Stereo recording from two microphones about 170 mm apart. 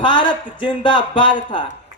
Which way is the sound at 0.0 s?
30° left (ahead or behind).